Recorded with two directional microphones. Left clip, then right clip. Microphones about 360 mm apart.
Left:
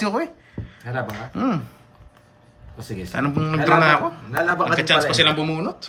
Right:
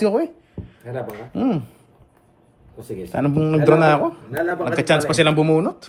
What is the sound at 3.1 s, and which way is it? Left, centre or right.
Speech, centre.